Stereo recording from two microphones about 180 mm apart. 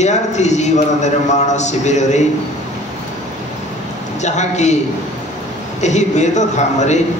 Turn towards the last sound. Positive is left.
turn(degrees=40)  # may be behind; listen again after turning